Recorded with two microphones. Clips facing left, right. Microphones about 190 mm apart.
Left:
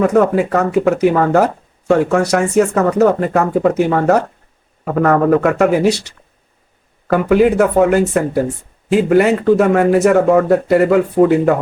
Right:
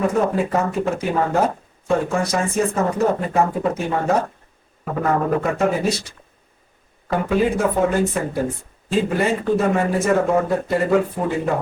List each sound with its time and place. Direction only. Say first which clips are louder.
0.1 s speech: left 6 dB; 70° left (ahead or behind)